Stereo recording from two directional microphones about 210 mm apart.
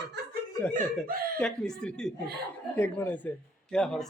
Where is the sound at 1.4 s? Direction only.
5° left (ahead or behind).